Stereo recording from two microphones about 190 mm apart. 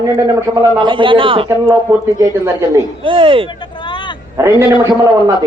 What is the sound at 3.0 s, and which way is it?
Speech, 25° right (ahead or behind).